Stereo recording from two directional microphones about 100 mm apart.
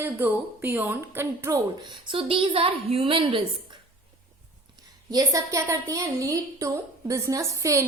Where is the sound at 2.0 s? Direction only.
60° right (ahead or behind).